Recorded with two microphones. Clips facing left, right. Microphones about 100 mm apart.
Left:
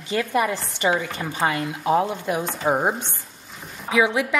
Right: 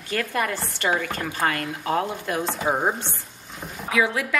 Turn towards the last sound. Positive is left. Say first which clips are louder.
# left 3 dB
turn(degrees=20)  # may be behind; listen again after turning